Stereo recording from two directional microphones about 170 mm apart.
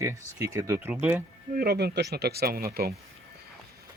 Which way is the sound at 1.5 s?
65° right (ahead or behind).